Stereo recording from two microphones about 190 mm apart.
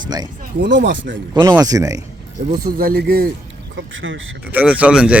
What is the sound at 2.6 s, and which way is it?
Speech, 50° right (ahead or behind).